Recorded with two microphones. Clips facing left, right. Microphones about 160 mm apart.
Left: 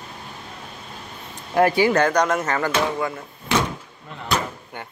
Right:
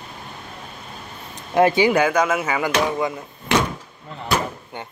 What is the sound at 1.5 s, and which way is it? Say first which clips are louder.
Speech: right 1 dB; 20° right (ahead or behind).